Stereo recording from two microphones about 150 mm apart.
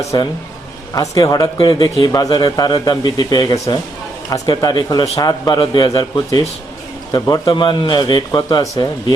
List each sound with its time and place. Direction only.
0.0 s a man's voice: 20° left (ahead or behind)